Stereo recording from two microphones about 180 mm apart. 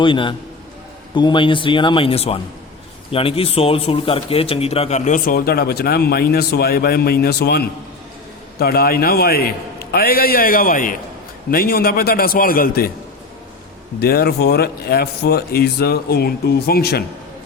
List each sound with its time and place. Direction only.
0.0 s a man's voice: 25° left (ahead or behind); by 12.9 s 55° left (ahead or behind)
14.0 s a man's voice: 60° left (ahead or behind)